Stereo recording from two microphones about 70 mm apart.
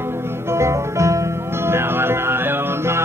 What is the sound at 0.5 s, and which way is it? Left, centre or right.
Music, right.